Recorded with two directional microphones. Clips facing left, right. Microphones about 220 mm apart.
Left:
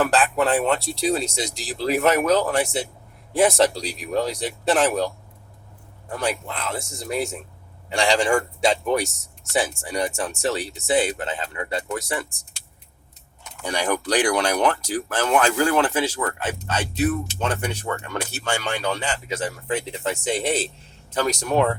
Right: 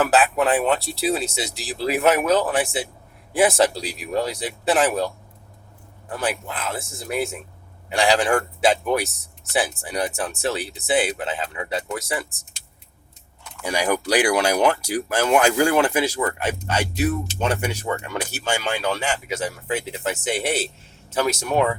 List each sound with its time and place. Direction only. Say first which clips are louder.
0.0 s a man's voice: right 1 dB; 5° right (ahead or behind)
6.1 s a man's voice: even; 5° right (ahead or behind)
13.6 s a man's voice: right 2 dB; 5° right (ahead or behind)